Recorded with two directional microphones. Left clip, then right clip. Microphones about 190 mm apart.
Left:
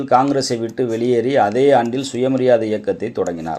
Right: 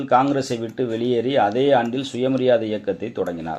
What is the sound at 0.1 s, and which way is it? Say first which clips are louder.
Speech: left 3 dB; 25° left (ahead or behind).